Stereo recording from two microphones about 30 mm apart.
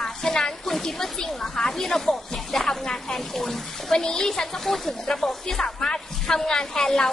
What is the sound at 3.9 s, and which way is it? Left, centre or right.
A woman's voice, left.